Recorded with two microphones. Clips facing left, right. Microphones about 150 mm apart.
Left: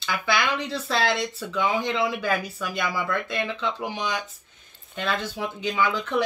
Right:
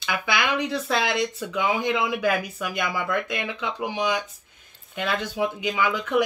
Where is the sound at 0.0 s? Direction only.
15° right (ahead or behind).